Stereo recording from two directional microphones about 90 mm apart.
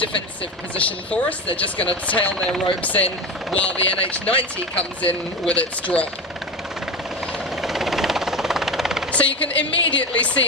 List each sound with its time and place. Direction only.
0.7 s speech: 15° left (ahead or behind)
7.6 s vehicle: 5° right (ahead or behind)
9.1 s speech: 15° left (ahead or behind)